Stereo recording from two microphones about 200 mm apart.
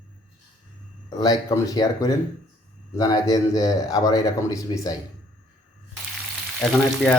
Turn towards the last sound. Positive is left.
turn(degrees=0)  # may be behind; listen again after turning